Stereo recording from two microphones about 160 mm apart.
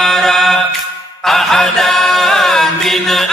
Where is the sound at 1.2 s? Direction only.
Centre (ahead or behind).